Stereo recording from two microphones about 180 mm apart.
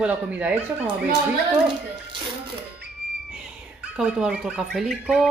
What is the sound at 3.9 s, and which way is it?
Speech, 5° right (ahead or behind).